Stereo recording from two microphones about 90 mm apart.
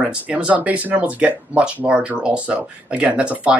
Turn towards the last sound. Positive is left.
turn(degrees=-10)  # may be behind; listen again after turning